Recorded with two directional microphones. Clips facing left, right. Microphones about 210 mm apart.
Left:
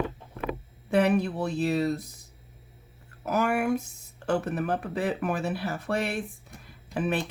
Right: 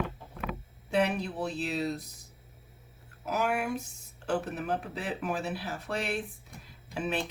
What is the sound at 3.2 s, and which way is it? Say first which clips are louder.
Speech: left 5 dB; 55° left (ahead or behind).